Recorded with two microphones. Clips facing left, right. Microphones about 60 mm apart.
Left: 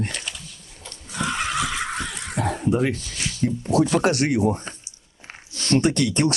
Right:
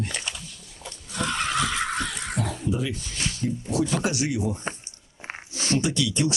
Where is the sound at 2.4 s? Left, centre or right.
Left.